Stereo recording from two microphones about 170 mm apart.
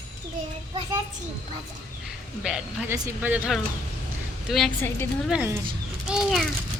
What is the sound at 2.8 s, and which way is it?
Speech, 15° right (ahead or behind).